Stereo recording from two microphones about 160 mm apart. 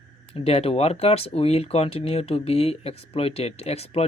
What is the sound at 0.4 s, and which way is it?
Speech, 40° left (ahead or behind).